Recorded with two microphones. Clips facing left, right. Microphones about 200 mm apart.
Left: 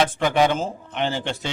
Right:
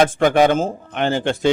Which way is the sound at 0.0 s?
50° right (ahead or behind).